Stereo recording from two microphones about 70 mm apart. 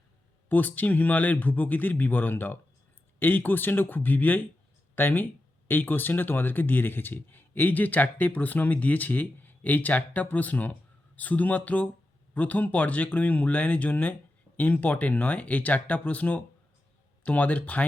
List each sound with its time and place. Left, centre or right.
0.4 s speech: left